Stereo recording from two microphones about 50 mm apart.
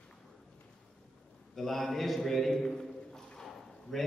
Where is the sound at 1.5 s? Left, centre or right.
Centre.